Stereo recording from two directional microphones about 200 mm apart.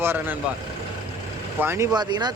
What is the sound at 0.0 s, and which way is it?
Speech, 10° right (ahead or behind).